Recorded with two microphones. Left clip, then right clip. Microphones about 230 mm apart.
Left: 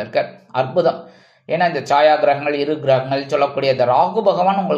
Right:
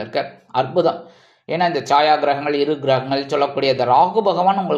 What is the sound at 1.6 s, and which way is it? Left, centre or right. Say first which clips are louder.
Speech: left 1 dB; centre.